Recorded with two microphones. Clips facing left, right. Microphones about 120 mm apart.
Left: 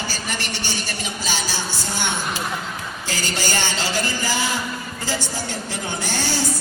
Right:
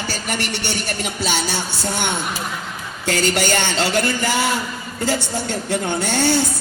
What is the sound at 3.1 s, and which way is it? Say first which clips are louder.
Music: right 8 dB; 65° right (ahead or behind).